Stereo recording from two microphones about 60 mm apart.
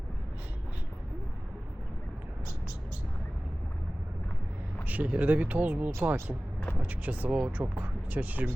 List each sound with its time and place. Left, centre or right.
4.9 s speech: right